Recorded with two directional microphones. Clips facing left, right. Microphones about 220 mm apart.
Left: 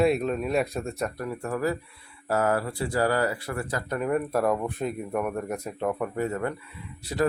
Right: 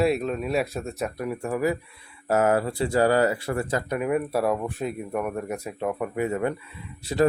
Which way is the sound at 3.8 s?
10° right (ahead or behind).